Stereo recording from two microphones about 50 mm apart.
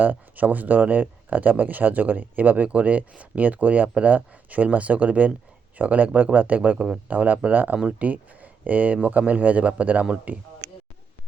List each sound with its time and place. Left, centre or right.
0.0 s speech: right
6.7 s speech: centre
7.1 s speech: right